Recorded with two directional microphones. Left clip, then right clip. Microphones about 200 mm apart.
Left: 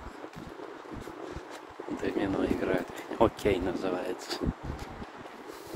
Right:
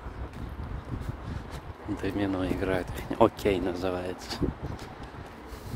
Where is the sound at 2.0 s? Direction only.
20° right (ahead or behind).